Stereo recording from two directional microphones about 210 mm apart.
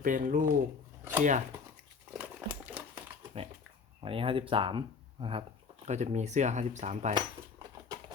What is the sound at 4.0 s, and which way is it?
Speech, 25° right (ahead or behind).